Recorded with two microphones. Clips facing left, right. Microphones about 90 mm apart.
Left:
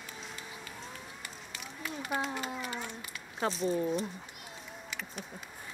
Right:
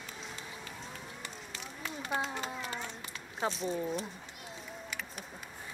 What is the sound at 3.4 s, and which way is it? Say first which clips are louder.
Speech: left 3 dB; centre (ahead or behind).